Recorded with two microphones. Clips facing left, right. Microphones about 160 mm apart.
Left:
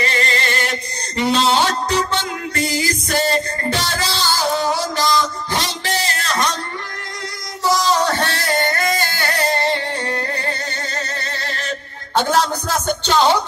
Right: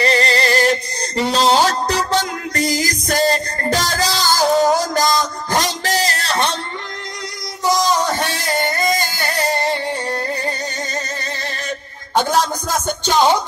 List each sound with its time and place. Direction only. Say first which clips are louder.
0.0 s music: right 5 dB; 35° right (ahead or behind)
7.6 s music: even; 15° right (ahead or behind)